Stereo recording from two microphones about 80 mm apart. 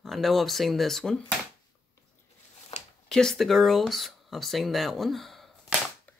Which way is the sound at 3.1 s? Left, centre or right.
Centre.